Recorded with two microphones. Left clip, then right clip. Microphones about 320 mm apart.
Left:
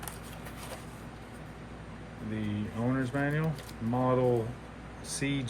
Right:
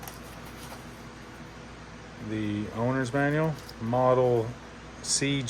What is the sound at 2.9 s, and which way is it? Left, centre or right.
Speech, centre.